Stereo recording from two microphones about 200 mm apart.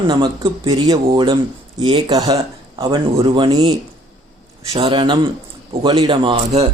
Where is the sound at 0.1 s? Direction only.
20° right (ahead or behind).